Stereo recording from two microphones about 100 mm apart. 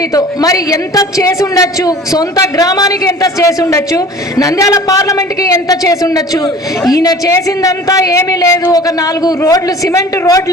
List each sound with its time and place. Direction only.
0.1 s a woman's voice: 35° left (ahead or behind)
8.6 s a woman's voice: 40° left (ahead or behind)